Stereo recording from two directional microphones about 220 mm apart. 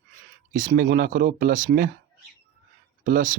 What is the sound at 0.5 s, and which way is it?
Speech, 40° right (ahead or behind).